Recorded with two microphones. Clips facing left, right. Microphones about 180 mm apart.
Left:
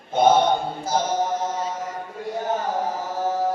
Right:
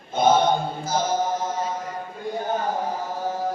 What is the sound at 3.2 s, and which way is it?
Chant, 80° left.